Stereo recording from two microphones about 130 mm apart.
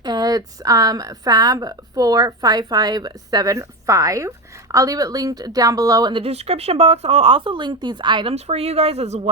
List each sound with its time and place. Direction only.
0.0 s a woman's voice: 30° right (ahead or behind)
8.4 s speech: 55° right (ahead or behind)